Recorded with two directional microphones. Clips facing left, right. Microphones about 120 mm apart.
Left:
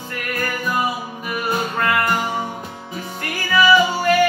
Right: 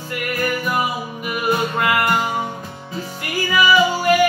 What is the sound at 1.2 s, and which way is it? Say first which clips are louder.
Music: right 3 dB; 10° right (ahead or behind).